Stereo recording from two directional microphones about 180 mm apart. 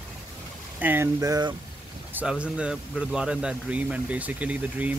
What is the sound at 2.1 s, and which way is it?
Speech, 5° right (ahead or behind).